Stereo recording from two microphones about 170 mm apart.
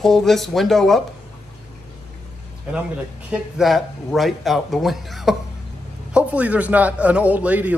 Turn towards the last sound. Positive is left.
turn(degrees=-10)  # may be behind; listen again after turning